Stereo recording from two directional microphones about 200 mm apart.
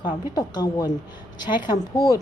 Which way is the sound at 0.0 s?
20° left (ahead or behind).